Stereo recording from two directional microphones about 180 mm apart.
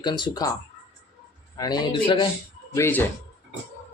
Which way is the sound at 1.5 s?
20° left (ahead or behind).